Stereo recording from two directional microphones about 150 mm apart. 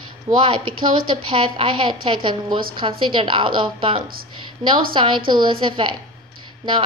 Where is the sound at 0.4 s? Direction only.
35° right (ahead or behind).